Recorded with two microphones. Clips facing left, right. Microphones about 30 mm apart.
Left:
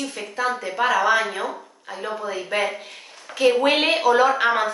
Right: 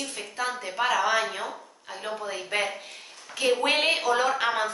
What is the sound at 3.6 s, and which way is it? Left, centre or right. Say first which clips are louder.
A woman's voice: left 5 dB; centre.